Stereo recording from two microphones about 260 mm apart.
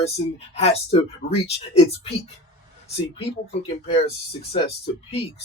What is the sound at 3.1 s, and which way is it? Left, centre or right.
Speech, left.